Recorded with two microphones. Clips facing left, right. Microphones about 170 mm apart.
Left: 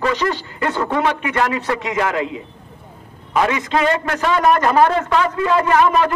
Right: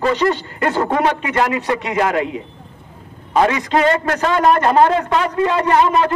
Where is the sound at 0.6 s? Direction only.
40° right (ahead or behind).